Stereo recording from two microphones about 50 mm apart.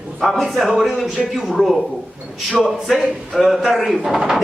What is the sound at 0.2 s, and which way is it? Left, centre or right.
Speech, centre.